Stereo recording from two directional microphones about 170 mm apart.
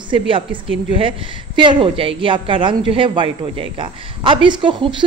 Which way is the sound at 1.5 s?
30° right (ahead or behind).